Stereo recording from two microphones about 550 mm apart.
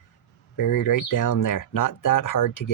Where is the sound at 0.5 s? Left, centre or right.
Left.